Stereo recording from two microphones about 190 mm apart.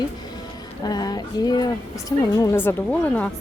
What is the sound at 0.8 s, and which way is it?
A woman's voice, 20° left (ahead or behind).